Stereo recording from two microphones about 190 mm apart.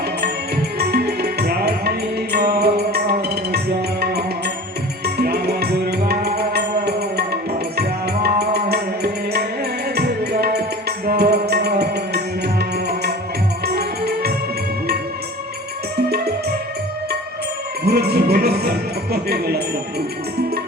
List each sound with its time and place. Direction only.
0.2 s music: 55° right (ahead or behind)
17.8 s music: 55° right (ahead or behind)